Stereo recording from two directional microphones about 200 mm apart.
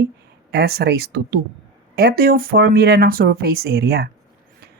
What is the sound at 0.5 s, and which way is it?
Speech, 55° right (ahead or behind).